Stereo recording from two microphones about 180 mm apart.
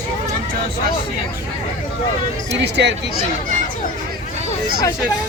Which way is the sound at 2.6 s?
70° right (ahead or behind).